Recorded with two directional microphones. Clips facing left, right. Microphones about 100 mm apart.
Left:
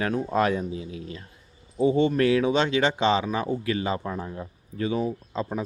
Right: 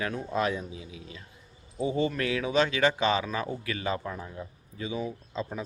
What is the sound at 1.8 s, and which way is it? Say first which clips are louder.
Speech: left 7 dB; 30° left (ahead or behind).